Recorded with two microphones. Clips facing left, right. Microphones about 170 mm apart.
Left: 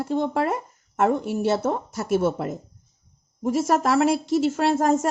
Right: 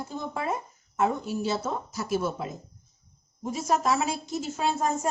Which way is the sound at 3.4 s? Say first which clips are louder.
Left 6 dB; 85° left.